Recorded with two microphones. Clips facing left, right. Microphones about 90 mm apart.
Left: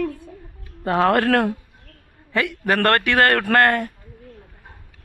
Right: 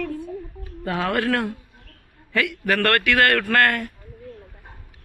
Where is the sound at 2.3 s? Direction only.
30° left (ahead or behind).